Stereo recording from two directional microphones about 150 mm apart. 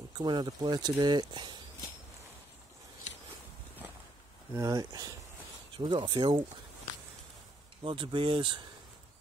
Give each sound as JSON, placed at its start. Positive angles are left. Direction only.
{"t": 0.2, "sound": "speech", "side_deg": -30}
{"t": 4.6, "sound": "speech", "side_deg": -25}
{"t": 7.8, "sound": "speech", "side_deg": -35}